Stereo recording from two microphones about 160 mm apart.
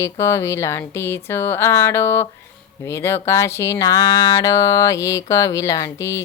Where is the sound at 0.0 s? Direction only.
20° left (ahead or behind).